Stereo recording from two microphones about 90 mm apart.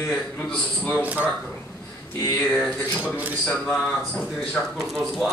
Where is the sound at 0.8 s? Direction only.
20° left (ahead or behind).